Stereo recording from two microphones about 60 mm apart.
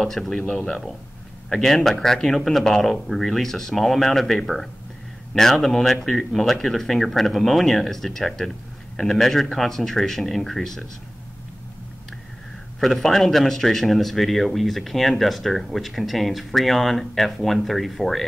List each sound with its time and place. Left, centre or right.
0.0 s speech: centre
0.4 s speech: left
1.5 s speech: centre
12.8 s speech: centre